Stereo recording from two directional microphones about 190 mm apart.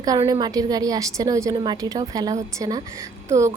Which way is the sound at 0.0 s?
20° right (ahead or behind).